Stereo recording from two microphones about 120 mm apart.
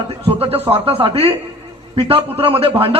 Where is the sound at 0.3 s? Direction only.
50° right (ahead or behind).